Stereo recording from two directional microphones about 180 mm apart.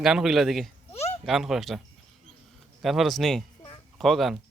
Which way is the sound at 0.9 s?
35° left (ahead or behind).